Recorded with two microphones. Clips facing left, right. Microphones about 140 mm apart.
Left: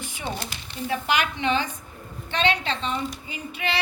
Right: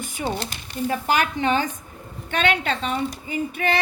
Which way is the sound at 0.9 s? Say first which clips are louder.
Right 2 dB; 40° right (ahead or behind).